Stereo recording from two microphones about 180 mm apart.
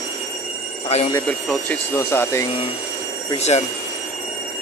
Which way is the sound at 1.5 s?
10° left (ahead or behind).